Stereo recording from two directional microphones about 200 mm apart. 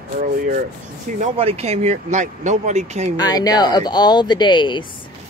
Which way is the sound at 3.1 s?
20° left (ahead or behind).